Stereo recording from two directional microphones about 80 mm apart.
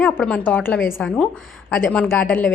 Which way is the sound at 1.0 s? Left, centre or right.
Centre.